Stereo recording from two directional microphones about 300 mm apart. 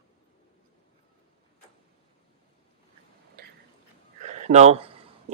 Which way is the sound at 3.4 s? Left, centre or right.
Right.